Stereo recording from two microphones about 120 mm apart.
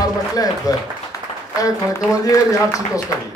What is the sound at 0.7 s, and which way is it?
Speech, 30° left (ahead or behind).